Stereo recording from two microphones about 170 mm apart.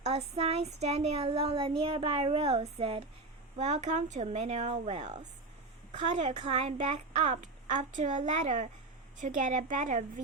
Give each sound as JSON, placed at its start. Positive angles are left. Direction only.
{"t": 0.0, "sound": "a child's voice", "side_deg": -40}